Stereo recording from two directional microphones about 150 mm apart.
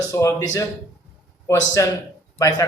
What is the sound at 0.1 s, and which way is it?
Speech, 20° left (ahead or behind).